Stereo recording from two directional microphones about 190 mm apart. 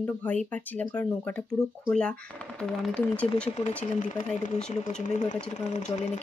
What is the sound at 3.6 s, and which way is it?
Speech, 40° left (ahead or behind).